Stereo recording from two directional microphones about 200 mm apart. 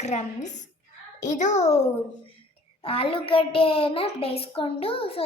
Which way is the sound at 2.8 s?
30° left (ahead or behind).